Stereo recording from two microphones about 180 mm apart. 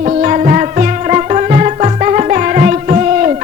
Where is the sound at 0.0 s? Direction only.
40° right (ahead or behind).